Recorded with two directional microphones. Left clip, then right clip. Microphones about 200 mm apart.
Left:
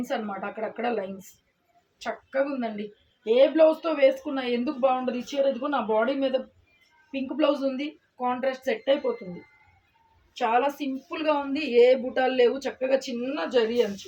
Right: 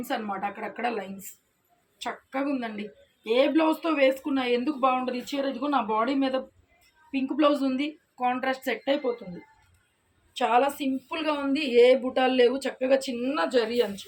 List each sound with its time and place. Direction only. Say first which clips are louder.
0.6 s a woman's voice: left 2 dB; 15° left (ahead or behind)
10.3 s a woman's voice: right 1 dB; 10° left (ahead or behind)